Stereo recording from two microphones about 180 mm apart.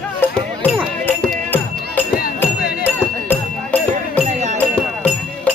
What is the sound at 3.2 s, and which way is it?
Music, 10° left (ahead or behind).